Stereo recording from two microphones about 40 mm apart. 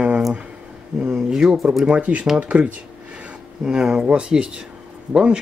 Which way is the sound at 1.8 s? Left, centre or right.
Right.